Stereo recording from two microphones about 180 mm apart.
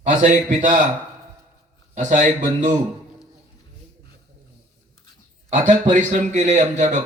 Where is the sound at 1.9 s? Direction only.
45° right (ahead or behind).